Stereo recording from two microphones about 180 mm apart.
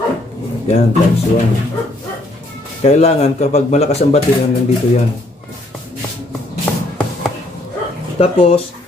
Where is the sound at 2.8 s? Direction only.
35° left (ahead or behind).